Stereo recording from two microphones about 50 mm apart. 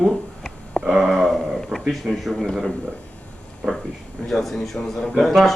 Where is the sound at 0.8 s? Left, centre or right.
Centre.